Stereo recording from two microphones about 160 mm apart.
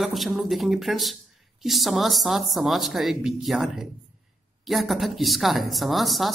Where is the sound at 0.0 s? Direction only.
Centre (ahead or behind).